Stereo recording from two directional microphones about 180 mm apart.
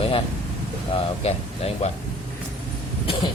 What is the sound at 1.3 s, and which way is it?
Speech, 35° left (ahead or behind).